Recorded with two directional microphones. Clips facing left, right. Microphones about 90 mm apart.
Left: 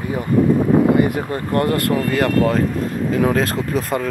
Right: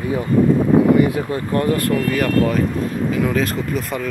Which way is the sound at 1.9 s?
25° left (ahead or behind).